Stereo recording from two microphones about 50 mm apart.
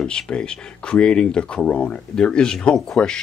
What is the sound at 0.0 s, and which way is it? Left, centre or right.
Speech, centre.